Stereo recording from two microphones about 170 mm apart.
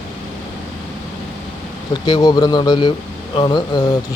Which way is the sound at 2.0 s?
25° left (ahead or behind).